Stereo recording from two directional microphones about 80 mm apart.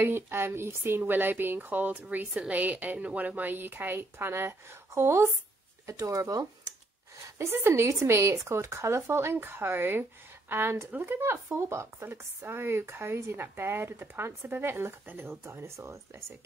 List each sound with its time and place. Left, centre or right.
0.0 s speech: right
7.2 s speech: right